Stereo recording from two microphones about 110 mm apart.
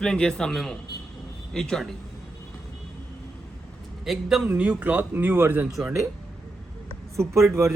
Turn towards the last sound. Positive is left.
turn(degrees=-25)  # may be behind; listen again after turning